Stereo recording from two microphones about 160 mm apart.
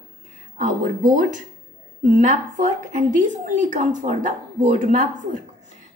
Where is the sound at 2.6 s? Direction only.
50° right (ahead or behind).